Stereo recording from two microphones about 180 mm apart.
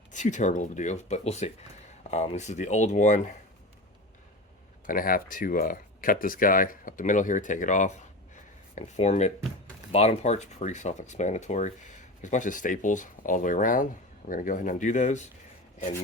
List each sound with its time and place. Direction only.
0.1 s speech: 45° left (ahead or behind)
4.9 s speech: 50° left (ahead or behind)